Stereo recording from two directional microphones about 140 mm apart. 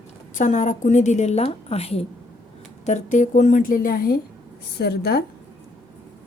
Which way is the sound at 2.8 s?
60° left (ahead or behind).